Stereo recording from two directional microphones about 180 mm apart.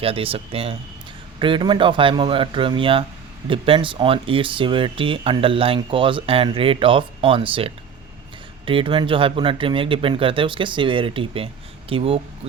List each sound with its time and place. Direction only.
0.0 s speech: 30° right (ahead or behind)